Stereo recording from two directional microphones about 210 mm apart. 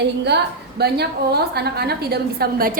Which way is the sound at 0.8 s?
50° right (ahead or behind).